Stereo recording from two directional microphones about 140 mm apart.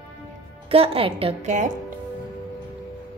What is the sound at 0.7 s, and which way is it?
Speech, 45° right (ahead or behind).